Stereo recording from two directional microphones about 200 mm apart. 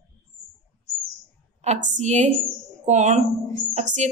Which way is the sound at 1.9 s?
35° right (ahead or behind).